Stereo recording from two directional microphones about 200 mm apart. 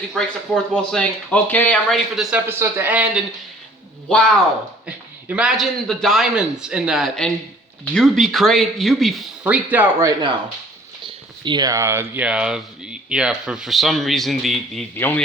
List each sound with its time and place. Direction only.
0.1 s speech: 5° left (ahead or behind)
2.5 s a man's voice: 10° right (ahead or behind)
4.1 s speech: 5° left (ahead or behind)